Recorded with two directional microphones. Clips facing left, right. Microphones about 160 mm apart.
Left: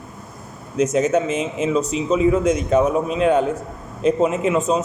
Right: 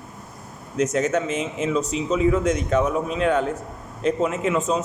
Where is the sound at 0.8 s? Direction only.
15° left (ahead or behind).